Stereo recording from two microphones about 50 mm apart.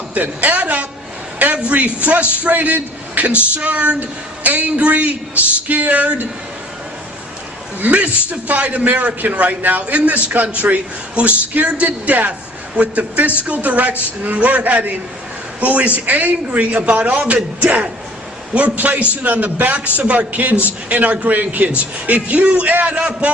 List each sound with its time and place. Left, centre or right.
0.1 s a woman's voice: right
7.8 s a man's voice: right
11.9 s a man's voice: right
23.0 s a man's voice: centre